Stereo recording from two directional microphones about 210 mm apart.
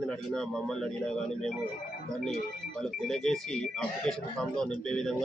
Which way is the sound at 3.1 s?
Centre (ahead or behind).